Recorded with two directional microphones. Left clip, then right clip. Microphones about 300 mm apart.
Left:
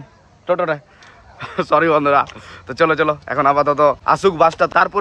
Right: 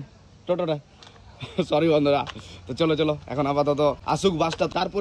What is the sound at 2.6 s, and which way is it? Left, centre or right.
Speech, centre.